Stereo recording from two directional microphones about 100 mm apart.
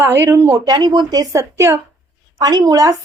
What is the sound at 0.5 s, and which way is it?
A woman's voice, 45° right (ahead or behind).